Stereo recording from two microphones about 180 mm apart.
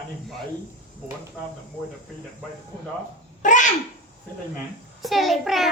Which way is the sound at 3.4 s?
45° left (ahead or behind).